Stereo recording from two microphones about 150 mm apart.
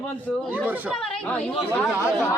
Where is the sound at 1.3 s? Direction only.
10° left (ahead or behind).